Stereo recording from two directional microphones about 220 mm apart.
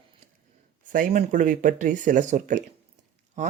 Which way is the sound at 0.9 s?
40° right (ahead or behind).